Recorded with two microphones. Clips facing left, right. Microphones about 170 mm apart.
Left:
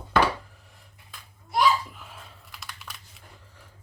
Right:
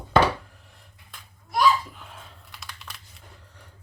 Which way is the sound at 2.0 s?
Centre (ahead or behind).